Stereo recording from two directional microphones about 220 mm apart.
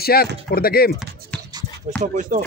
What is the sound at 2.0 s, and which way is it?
Speech, 35° right (ahead or behind).